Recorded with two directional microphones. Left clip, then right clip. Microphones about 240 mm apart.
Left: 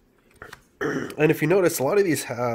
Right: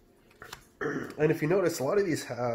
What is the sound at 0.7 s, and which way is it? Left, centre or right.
Speech, left.